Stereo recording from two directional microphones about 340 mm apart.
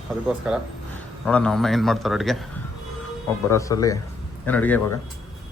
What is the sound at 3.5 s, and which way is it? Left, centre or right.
A man's voice, centre.